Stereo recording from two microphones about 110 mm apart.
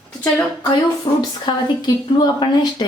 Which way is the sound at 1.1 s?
50° left (ahead or behind).